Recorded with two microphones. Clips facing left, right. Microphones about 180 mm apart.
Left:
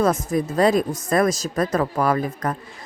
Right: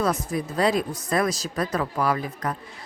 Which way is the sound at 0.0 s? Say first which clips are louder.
Left 5 dB; 45° left (ahead or behind).